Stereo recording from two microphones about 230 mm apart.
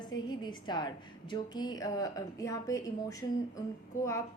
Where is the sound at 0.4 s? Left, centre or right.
Centre.